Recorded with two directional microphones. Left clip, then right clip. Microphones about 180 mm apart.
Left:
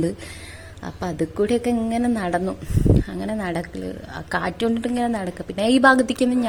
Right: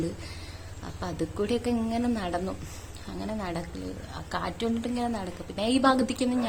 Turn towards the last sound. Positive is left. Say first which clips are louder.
# left 8 dB
turn(degrees=35)  # may be behind; listen again after turning